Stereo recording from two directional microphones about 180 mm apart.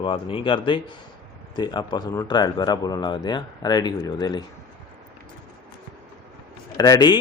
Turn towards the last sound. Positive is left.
turn(degrees=20)  # may be behind; listen again after turning